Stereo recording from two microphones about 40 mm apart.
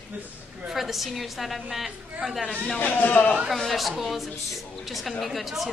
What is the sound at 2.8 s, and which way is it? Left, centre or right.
Speech, left.